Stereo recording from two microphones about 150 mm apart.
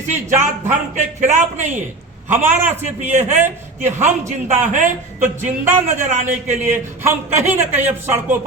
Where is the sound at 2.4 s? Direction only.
15° right (ahead or behind).